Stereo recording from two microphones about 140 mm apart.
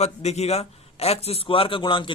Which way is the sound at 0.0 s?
50° left (ahead or behind).